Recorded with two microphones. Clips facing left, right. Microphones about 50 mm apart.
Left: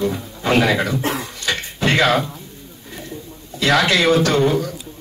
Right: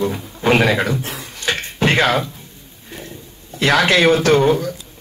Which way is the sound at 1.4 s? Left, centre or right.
Right.